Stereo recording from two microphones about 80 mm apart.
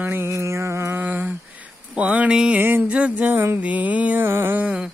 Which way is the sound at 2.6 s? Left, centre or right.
Right.